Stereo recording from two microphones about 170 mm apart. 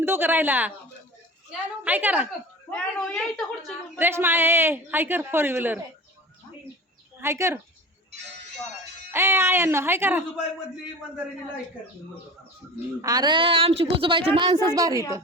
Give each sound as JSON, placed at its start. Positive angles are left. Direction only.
{"t": 0.0, "sound": "speech", "side_deg": -15}
{"t": 2.6, "sound": "a woman's voice", "side_deg": 5}
{"t": 3.9, "sound": "speech", "side_deg": -10}
{"t": 7.2, "sound": "speech", "side_deg": -15}
{"t": 9.1, "sound": "speech", "side_deg": -15}
{"t": 13.0, "sound": "a woman's voice", "side_deg": -20}